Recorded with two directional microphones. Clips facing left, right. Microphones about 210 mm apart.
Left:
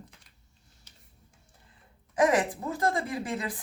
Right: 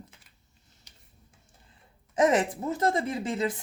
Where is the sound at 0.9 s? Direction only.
15° right (ahead or behind).